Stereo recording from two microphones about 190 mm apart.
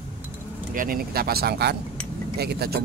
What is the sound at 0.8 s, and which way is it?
Speech, 50° right (ahead or behind).